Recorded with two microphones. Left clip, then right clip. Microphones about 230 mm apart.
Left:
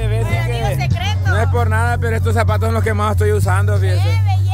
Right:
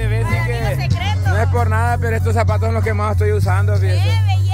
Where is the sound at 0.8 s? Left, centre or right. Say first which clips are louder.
Left 1 dB; centre.